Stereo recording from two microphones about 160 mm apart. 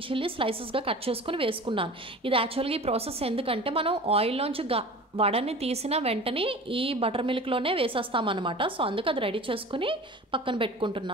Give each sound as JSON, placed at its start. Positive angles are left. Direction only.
{"t": 0.1, "sound": "a woman's voice", "side_deg": -35}